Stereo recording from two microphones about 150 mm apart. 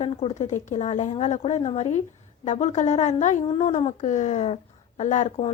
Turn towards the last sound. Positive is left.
turn(degrees=55)  # may be behind; listen again after turning